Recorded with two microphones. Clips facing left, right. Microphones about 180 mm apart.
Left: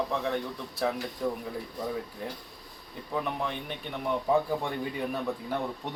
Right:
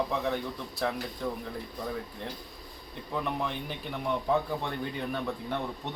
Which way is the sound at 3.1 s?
Centre (ahead or behind).